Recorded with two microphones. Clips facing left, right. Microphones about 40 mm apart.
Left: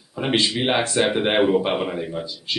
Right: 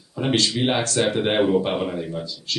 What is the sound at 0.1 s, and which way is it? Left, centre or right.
Speech, centre.